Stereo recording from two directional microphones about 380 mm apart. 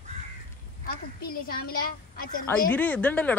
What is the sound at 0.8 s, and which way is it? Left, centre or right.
A woman's voice, left.